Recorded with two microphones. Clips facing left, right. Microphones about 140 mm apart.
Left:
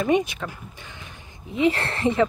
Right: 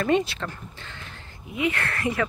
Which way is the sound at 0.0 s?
15° left (ahead or behind).